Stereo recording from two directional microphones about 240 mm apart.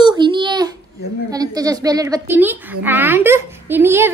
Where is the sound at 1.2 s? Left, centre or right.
Centre.